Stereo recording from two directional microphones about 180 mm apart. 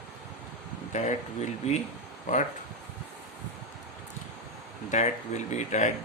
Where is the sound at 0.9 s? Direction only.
40° left (ahead or behind).